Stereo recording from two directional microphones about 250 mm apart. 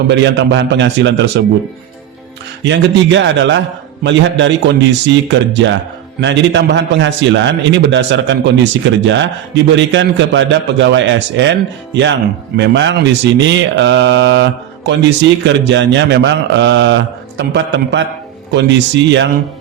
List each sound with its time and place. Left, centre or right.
0.1 s a man's voice: right
2.6 s a man's voice: right
12.5 s a man's voice: right